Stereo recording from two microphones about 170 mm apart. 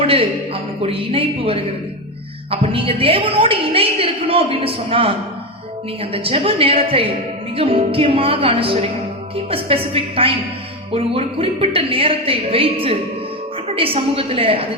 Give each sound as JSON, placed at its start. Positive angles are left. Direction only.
{"t": 0.0, "sound": "a woman's voice", "side_deg": -35}